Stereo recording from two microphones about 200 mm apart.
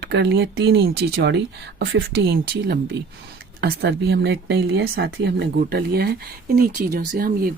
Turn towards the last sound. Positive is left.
turn(degrees=-45)  # may be behind; listen again after turning